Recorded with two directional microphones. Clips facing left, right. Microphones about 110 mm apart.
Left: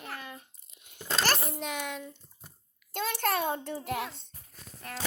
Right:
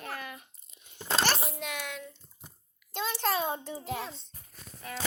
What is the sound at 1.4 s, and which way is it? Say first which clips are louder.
Speech: left 2 dB; centre (ahead or behind).